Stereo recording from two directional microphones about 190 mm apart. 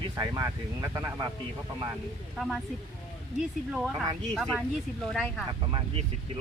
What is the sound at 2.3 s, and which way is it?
Speech, centre (ahead or behind).